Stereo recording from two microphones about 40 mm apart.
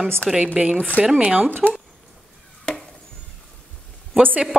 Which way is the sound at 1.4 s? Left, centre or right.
Right.